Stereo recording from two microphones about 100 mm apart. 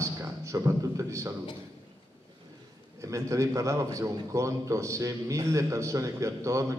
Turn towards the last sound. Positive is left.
turn(degrees=-30)  # may be behind; listen again after turning